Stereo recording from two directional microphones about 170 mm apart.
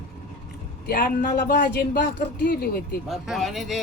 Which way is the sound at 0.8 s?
55° left (ahead or behind).